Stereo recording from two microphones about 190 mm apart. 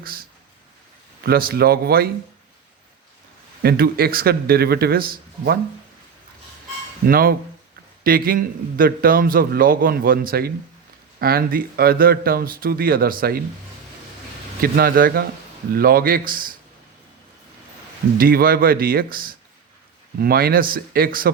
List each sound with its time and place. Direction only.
0.0 s speech: 50° right (ahead or behind)
3.6 s speech: 55° right (ahead or behind)
7.1 s a man's voice: 50° right (ahead or behind)
14.6 s a man's voice: 50° right (ahead or behind)
18.2 s a man's voice: 50° right (ahead or behind)